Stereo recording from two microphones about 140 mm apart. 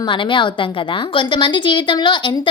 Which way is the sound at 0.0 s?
35° left (ahead or behind).